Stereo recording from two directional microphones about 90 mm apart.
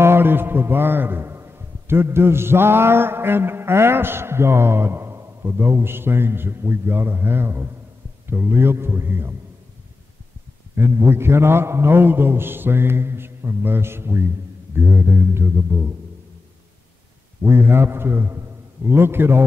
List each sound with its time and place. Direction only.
0.0 s a man's voice: 25° right (ahead or behind)
10.8 s a man's voice: 25° right (ahead or behind)
17.5 s a man's voice: 25° right (ahead or behind)